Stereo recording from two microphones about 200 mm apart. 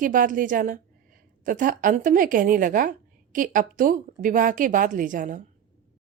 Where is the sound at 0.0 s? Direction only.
40° right (ahead or behind).